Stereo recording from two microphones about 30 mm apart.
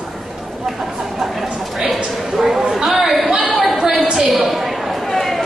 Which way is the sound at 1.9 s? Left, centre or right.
Centre.